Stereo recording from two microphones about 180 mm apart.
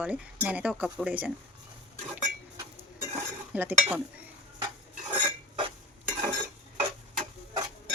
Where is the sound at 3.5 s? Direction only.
10° right (ahead or behind).